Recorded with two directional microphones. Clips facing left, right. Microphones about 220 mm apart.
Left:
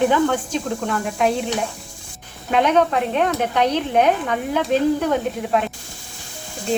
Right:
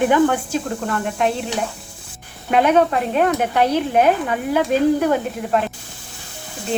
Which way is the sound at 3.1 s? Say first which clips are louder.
Right 3 dB; 10° right (ahead or behind).